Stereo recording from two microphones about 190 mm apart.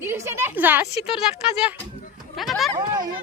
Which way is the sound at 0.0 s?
10° right (ahead or behind).